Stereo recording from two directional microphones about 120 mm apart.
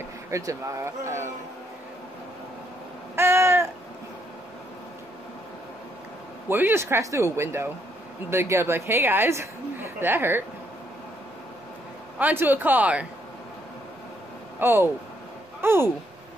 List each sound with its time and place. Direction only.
0.3 s a woman's voice: 25° right (ahead or behind)
3.2 s a sound: 20° right (ahead or behind)
6.5 s a woman's voice: 20° right (ahead or behind)
12.2 s speech: 15° right (ahead or behind)
14.6 s a woman's voice: 20° right (ahead or behind)